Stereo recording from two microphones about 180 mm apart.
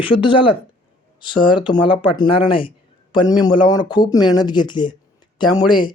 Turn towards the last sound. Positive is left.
turn(degrees=25)  # may be behind; listen again after turning